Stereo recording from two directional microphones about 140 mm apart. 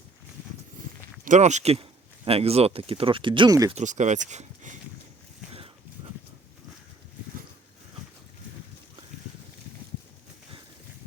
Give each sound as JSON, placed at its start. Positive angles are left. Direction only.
{"t": 1.2, "sound": "speech", "side_deg": -60}
{"t": 3.7, "sound": "speech", "side_deg": -55}